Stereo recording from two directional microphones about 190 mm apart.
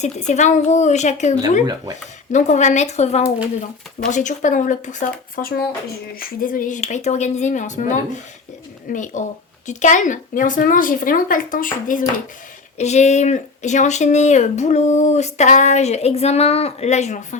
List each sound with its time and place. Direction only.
0.0 s speech: 35° left (ahead or behind)